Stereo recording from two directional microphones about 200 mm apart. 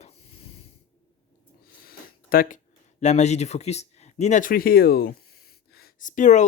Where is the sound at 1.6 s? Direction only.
50° left (ahead or behind).